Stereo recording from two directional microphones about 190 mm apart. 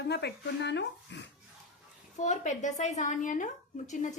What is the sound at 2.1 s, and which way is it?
Speech, 40° left (ahead or behind).